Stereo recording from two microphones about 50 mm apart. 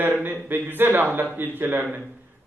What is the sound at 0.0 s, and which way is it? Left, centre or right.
A man's voice, right.